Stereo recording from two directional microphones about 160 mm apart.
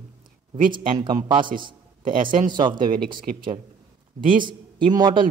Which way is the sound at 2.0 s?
60° right (ahead or behind).